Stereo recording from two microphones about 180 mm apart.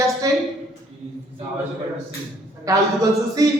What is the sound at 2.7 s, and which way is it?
Speech, 20° right (ahead or behind).